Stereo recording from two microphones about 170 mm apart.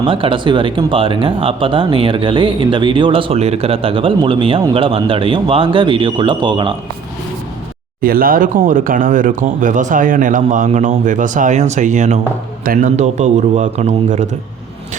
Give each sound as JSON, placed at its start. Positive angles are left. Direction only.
{"t": 0.0, "sound": "speech", "side_deg": -30}
{"t": 8.0, "sound": "speech", "side_deg": -60}